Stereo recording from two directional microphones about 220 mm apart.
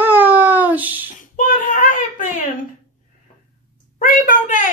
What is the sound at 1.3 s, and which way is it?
Child singing, 35° left (ahead or behind).